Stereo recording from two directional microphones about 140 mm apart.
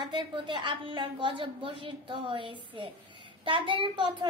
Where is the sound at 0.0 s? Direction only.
35° right (ahead or behind).